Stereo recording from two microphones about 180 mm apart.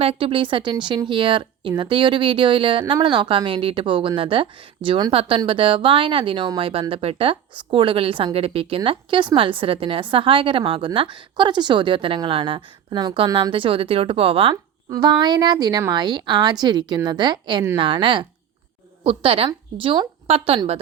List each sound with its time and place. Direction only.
0.0 s speech: 30° right (ahead or behind)
14.5 s a woman's voice: 20° right (ahead or behind)